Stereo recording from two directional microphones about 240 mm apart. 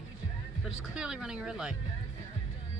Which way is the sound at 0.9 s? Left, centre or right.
Centre.